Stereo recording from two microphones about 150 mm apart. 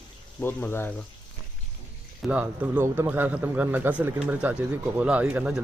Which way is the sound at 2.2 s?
10° right (ahead or behind).